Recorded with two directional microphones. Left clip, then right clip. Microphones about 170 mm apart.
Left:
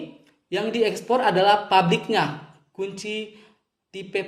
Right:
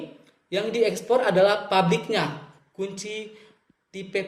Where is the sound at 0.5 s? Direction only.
45° left (ahead or behind).